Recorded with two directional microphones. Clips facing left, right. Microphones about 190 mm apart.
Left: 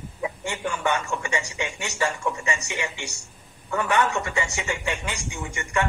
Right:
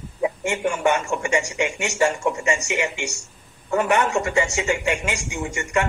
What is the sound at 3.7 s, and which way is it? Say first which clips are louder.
Speech: right 4 dB; 20° right (ahead or behind).